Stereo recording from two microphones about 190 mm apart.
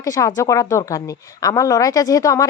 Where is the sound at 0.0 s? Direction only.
15° left (ahead or behind).